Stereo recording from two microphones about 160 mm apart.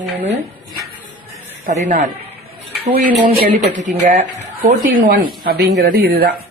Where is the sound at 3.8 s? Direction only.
50° right (ahead or behind).